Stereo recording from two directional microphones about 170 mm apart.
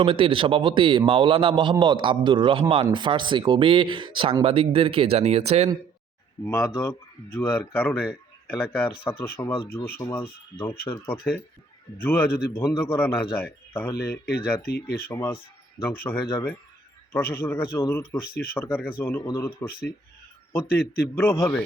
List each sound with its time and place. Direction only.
0.0 s speech: 30° right (ahead or behind)
6.4 s speech: 15° left (ahead or behind)
13.9 s speech: 70° left (ahead or behind)
15.0 s speech: 15° left (ahead or behind)